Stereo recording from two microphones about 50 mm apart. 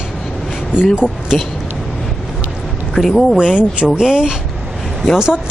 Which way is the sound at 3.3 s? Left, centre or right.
Centre.